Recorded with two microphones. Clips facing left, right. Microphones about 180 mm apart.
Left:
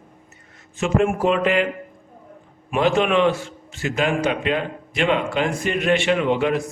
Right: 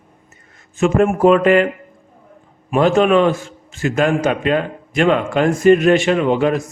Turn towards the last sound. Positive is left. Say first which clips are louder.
# right 4 dB
turn(degrees=-45)  # may be behind; listen again after turning